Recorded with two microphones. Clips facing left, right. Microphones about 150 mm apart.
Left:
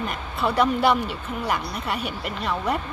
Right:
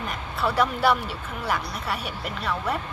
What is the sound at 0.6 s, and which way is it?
Speech, 20° left (ahead or behind).